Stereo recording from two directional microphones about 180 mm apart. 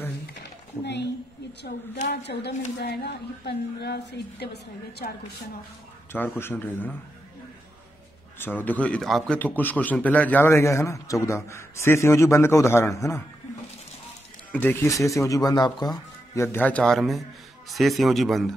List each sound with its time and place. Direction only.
2.0 s a woman's voice: 65° left (ahead or behind)
6.1 s a man's voice: 10° left (ahead or behind)
8.4 s a man's voice: 10° left (ahead or behind)
14.5 s a man's voice: 10° left (ahead or behind)
16.5 s speech: 5° left (ahead or behind)